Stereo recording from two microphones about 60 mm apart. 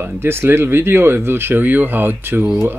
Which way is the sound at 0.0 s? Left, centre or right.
Right.